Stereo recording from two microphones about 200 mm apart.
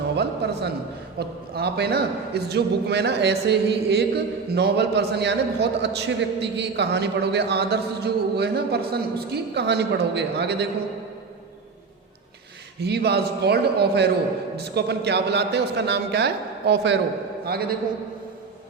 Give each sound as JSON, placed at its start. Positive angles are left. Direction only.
{"t": 0.2, "sound": "a sound", "side_deg": -55}
{"t": 1.2, "sound": "a man's voice", "side_deg": -50}
{"t": 12.8, "sound": "a man's voice", "side_deg": -55}